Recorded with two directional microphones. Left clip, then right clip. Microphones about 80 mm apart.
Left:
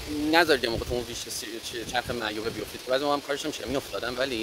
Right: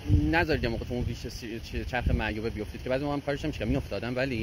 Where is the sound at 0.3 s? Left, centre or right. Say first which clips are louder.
Left 6 dB; left.